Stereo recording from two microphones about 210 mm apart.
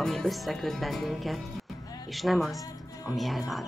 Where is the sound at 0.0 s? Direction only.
Centre (ahead or behind).